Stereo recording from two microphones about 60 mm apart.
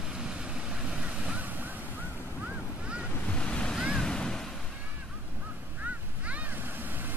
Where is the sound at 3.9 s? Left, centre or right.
Centre.